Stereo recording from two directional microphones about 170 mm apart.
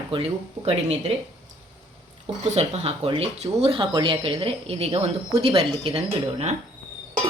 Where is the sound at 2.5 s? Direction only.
40° right (ahead or behind).